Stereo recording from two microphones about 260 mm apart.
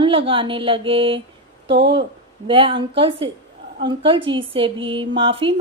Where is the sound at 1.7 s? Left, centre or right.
Right.